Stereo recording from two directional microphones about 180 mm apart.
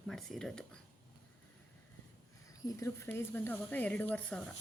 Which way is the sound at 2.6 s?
15° left (ahead or behind).